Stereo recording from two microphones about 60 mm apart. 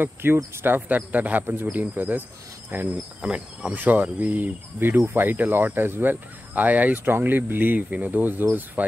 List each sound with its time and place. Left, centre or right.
0.0 s speech: right
1.7 s speech: right
3.2 s cricket: centre
3.7 s speech: right